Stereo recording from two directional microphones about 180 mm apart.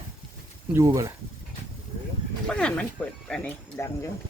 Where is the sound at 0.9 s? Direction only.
15° right (ahead or behind).